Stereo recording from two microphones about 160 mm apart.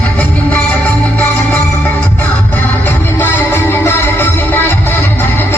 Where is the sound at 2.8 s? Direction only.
15° left (ahead or behind).